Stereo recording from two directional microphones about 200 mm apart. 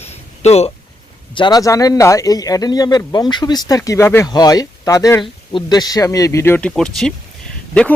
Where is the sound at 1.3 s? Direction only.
20° left (ahead or behind).